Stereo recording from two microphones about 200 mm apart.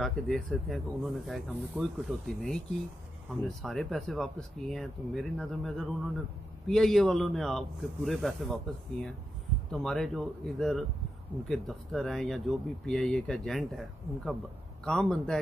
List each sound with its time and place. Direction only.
0.0 s speech: centre (ahead or behind)
9.7 s speech: centre (ahead or behind)